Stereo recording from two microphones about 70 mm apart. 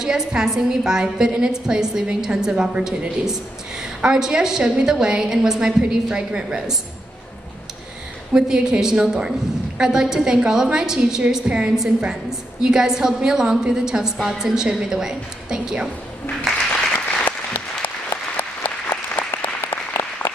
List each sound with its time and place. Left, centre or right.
0.0 s a woman's voice: centre
8.3 s a woman's voice: centre
18.3 s applause: left